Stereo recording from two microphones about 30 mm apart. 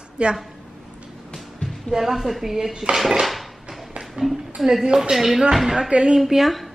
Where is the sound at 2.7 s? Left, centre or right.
Right.